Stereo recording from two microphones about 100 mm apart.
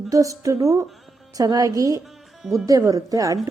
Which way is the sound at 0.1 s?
35° right (ahead or behind).